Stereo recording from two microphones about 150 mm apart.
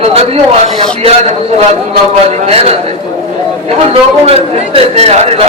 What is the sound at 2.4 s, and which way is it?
Speech, 45° right (ahead or behind).